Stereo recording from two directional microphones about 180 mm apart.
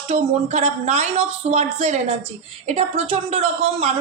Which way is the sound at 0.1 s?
40° right (ahead or behind).